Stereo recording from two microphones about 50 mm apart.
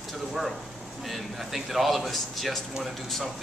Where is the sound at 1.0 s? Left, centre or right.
Centre.